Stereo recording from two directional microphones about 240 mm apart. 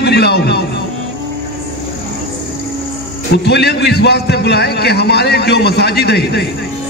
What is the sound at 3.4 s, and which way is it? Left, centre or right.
A man's voice, left.